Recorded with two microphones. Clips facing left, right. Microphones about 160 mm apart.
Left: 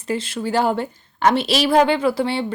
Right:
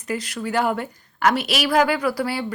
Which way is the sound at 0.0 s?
25° left (ahead or behind).